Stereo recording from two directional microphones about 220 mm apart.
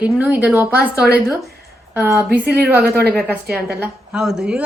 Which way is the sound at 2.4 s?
45° right (ahead or behind).